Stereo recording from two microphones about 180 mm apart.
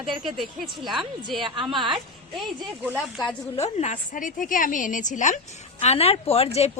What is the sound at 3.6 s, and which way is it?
A woman's voice, 40° left (ahead or behind).